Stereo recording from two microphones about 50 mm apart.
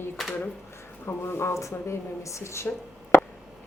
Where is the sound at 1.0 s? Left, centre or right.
Left.